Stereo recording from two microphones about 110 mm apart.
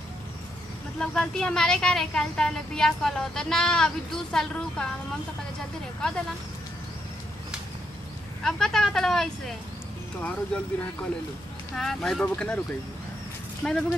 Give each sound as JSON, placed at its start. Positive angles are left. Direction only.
{"t": 0.9, "sound": "speech", "side_deg": 5}
{"t": 8.5, "sound": "speech", "side_deg": 5}
{"t": 13.6, "sound": "speech", "side_deg": 5}